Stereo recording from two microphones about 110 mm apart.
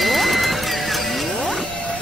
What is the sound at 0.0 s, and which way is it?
Music, centre (ahead or behind).